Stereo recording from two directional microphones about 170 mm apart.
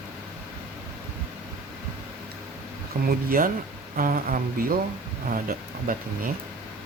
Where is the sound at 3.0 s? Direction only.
60° right (ahead or behind).